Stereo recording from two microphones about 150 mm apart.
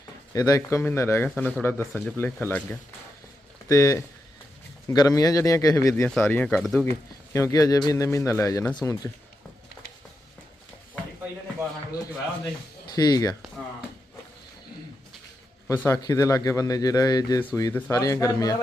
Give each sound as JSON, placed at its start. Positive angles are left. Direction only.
{"t": 0.3, "sound": "speech", "side_deg": 20}
{"t": 1.9, "sound": "speech", "side_deg": 0}
{"t": 2.1, "sound": "speech", "side_deg": 15}
{"t": 3.7, "sound": "speech", "side_deg": 20}
{"t": 5.9, "sound": "speech", "side_deg": 5}
{"t": 6.5, "sound": "speech", "side_deg": 0}
{"t": 7.3, "sound": "speech", "side_deg": 20}
{"t": 13.0, "sound": "speech", "side_deg": 25}
{"t": 15.6, "sound": "a man's voice", "side_deg": 15}